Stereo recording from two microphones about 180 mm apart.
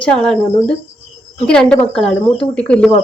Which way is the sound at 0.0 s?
5° left (ahead or behind).